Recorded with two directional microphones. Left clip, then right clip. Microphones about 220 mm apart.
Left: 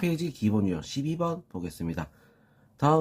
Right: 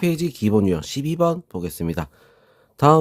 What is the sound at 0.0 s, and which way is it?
Speech, 50° right (ahead or behind).